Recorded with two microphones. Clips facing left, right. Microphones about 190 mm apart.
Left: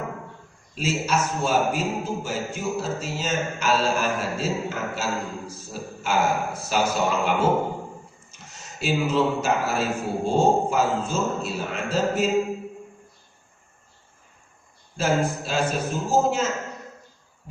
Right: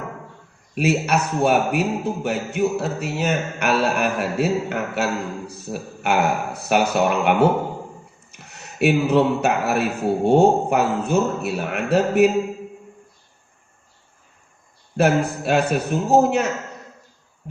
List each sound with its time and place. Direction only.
0.8 s a man's voice: 65° right (ahead or behind)
14.9 s a man's voice: 65° right (ahead or behind)
17.5 s a sound: 70° right (ahead or behind)